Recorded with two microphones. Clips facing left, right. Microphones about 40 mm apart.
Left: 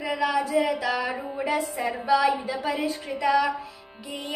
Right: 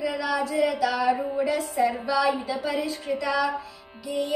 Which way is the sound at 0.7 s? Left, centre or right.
Centre.